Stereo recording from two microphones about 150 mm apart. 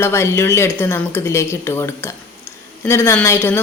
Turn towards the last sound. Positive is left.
turn(degrees=15)  # may be behind; listen again after turning